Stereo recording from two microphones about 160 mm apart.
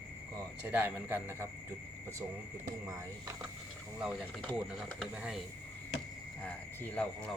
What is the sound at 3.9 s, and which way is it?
Speech, 5° right (ahead or behind).